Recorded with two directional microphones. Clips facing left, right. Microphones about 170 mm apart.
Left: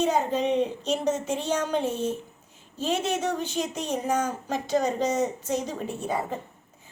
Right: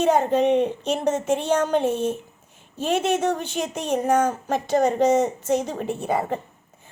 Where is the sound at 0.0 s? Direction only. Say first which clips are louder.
Right 5 dB; 60° right (ahead or behind).